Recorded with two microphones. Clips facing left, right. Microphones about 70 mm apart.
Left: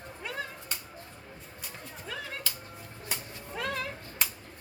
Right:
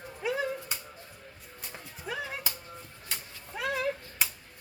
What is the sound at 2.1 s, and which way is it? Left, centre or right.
Music, centre.